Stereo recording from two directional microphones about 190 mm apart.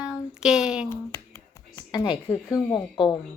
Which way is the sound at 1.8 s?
25° left (ahead or behind).